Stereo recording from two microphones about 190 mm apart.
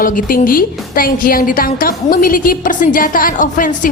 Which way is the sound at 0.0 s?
45° left (ahead or behind).